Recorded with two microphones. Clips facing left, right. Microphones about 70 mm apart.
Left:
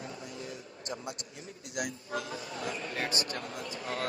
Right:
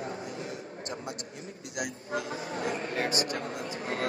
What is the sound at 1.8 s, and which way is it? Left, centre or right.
A man's voice, right.